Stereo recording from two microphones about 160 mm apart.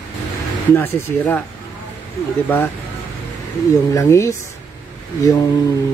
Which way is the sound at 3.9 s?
20° left (ahead or behind).